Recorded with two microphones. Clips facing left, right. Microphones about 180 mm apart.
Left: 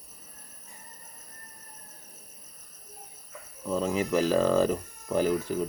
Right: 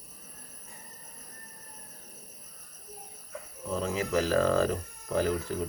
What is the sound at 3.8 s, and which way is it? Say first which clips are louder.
Speech: left 3 dB; 15° left (ahead or behind).